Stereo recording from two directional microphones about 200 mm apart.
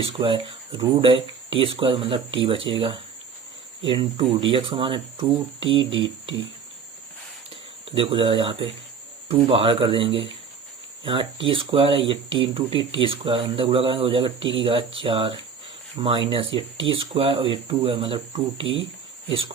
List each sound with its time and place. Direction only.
0.0 s speech: 25° right (ahead or behind)
3.8 s speech: 25° right (ahead or behind)
7.5 s speech: 25° right (ahead or behind)